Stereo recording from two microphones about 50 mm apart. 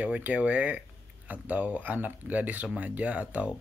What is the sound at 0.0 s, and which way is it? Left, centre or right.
Speech, right.